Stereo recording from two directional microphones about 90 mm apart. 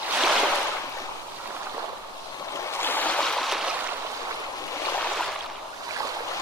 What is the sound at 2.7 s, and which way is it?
Stream, 25° left (ahead or behind).